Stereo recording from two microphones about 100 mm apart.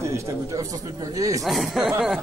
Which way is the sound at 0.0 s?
30° right (ahead or behind).